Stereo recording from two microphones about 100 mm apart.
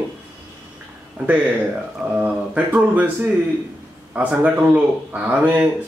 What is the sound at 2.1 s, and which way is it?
Speech, 15° right (ahead or behind).